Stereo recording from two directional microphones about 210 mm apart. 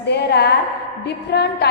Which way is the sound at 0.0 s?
50° left (ahead or behind).